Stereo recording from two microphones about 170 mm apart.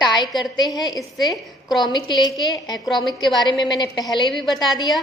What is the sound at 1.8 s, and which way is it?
Speech, 25° left (ahead or behind).